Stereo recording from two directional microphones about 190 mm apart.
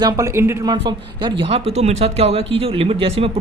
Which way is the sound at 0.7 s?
25° right (ahead or behind).